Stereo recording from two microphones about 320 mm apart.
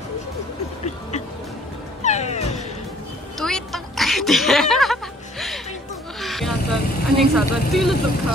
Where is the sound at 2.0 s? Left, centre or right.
Left.